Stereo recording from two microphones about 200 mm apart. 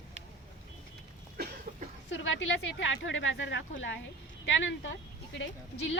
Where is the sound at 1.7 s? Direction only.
40° right (ahead or behind).